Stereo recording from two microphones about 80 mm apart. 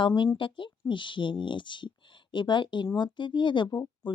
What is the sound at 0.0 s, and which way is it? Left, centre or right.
A woman's voice, left.